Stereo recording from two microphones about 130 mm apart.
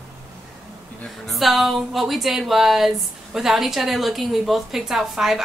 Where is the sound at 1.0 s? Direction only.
Centre (ahead or behind).